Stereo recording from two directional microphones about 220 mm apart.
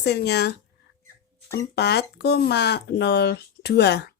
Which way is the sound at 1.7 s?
50° left (ahead or behind).